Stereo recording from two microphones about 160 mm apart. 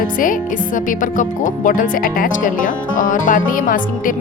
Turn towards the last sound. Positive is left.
turn(degrees=55)  # may be behind; listen again after turning